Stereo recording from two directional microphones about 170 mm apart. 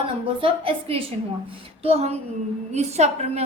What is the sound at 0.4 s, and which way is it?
A woman's voice, 30° right (ahead or behind).